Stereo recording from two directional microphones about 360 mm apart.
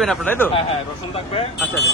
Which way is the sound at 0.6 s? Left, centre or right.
Centre.